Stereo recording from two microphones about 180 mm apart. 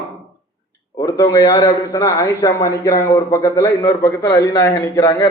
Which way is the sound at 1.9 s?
15° left (ahead or behind).